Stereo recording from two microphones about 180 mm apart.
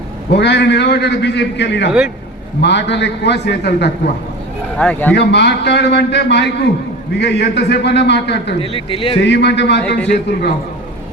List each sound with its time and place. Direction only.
0.3 s a man's voice: 70° left (ahead or behind)
4.8 s a man's voice: 10° left (ahead or behind)
5.1 s a man's voice: 70° left (ahead or behind)
8.6 s a man's voice: 30° left (ahead or behind)
9.2 s a man's voice: 75° left (ahead or behind)